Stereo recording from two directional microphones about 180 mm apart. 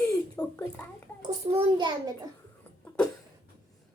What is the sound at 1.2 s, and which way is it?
Speech, 35° right (ahead or behind).